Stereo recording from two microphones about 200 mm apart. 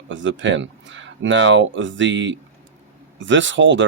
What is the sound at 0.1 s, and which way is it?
Speech, 70° right (ahead or behind).